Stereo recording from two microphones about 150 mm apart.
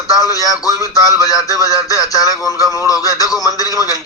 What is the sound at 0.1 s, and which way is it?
A man's voice, 25° left (ahead or behind).